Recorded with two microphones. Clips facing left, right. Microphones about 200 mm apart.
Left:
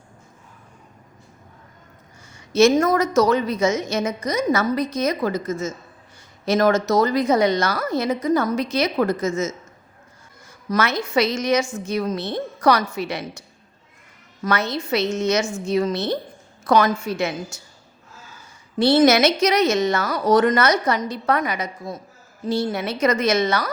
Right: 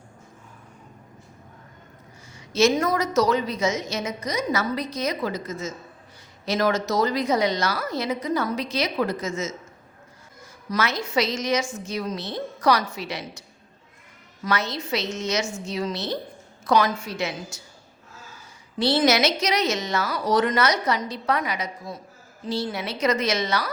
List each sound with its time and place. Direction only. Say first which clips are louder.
2.5 s a woman's voice: left 5 dB; 50° left (ahead or behind)
10.7 s a woman's voice: left 4 dB; 55° left (ahead or behind)
14.4 s a woman's voice: left 4 dB; 55° left (ahead or behind)
18.8 s a woman's voice: left 5 dB; 50° left (ahead or behind)